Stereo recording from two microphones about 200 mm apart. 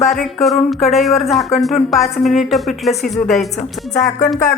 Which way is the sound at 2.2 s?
Centre (ahead or behind).